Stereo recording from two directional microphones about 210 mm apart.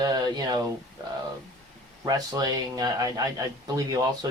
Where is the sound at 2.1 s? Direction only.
20° right (ahead or behind).